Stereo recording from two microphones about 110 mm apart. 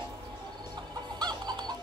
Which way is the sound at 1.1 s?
40° right (ahead or behind).